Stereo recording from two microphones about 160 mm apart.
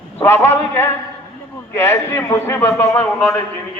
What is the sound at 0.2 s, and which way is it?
A man's voice, 15° left (ahead or behind).